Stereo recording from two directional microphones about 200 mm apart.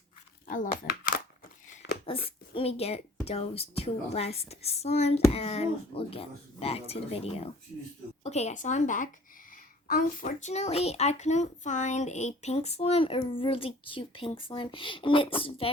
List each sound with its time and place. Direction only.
0.4 s a child's voice: 40° left (ahead or behind)
1.1 s a sound: 40° left (ahead or behind)
2.2 s a child's voice: 30° left (ahead or behind)